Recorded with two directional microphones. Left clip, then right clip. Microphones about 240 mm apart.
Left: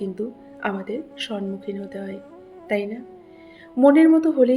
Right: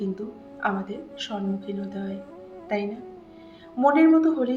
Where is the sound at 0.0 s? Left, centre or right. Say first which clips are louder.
Left 3 dB; left.